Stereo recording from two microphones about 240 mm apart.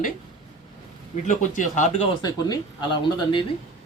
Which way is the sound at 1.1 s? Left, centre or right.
Left.